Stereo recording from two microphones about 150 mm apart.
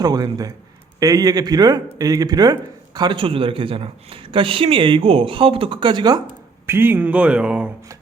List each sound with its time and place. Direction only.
0.0 s a man's voice: 25° right (ahead or behind)
6.7 s speech: 15° right (ahead or behind)